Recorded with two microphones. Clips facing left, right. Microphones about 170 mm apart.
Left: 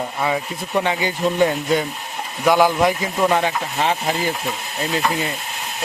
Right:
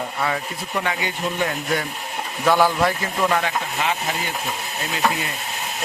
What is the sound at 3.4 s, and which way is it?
Speech, 30° left (ahead or behind).